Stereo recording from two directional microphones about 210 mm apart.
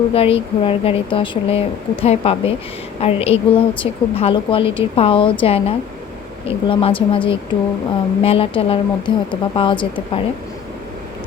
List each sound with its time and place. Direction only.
0.1 s a woman's voice: 25° left (ahead or behind)